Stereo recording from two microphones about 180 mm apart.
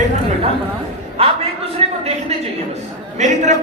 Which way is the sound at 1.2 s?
30° right (ahead or behind).